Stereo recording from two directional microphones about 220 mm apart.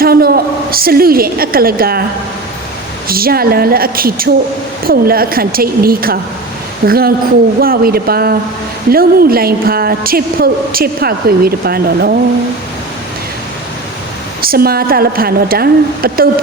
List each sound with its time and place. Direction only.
0.0 s a woman's voice: 45° right (ahead or behind)
3.1 s a woman's voice: 40° right (ahead or behind)
14.4 s a woman's voice: 45° right (ahead or behind)